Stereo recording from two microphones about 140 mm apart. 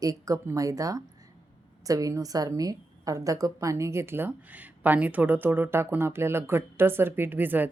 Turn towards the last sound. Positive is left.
turn(degrees=-15)  # may be behind; listen again after turning